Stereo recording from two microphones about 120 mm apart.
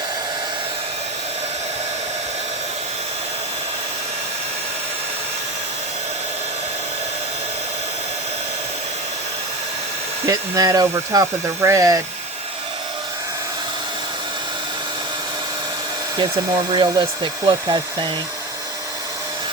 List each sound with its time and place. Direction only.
10.2 s speech: 30° right (ahead or behind)
16.7 s speech: 40° right (ahead or behind)